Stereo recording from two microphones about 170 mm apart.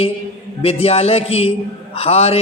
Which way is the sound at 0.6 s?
35° left (ahead or behind).